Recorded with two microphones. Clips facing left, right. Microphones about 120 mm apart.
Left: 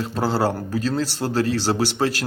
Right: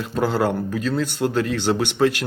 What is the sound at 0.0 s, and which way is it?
A man's voice, 35° left (ahead or behind).